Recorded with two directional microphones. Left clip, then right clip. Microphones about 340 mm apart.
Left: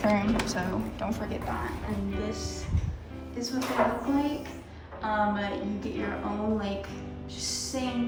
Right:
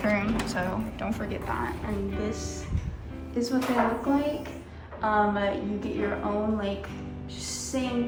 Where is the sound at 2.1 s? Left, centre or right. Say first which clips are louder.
Right 1 dB; centre.